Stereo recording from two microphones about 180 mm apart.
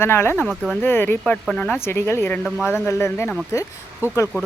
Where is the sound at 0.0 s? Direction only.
15° left (ahead or behind).